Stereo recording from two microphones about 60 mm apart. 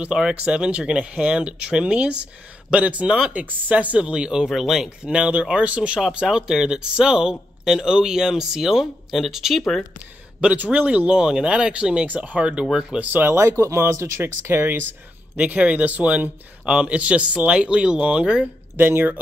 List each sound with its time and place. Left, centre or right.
0.0 s speech: centre
5.0 s speech: centre
10.4 s speech: right
13.0 s speech: right
13.3 s speech: right
14.2 s speech: right
15.3 s speech: right
18.8 s speech: right